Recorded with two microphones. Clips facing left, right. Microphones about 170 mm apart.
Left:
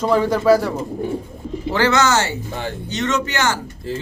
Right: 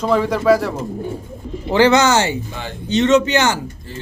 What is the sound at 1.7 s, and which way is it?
A man's voice, 15° right (ahead or behind).